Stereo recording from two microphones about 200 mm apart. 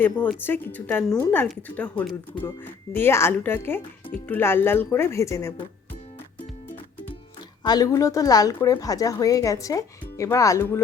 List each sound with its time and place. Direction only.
0.0 s speech: 10° left (ahead or behind)
7.6 s speech: 20° left (ahead or behind)